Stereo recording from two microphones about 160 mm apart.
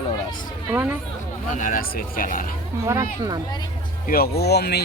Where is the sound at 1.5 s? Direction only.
55° left (ahead or behind).